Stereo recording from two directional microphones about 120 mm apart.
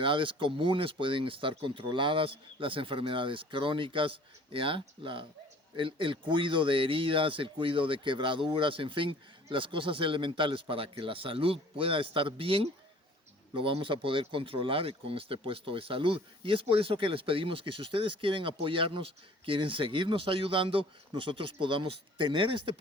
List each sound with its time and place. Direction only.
0.0 s speech: 45° right (ahead or behind)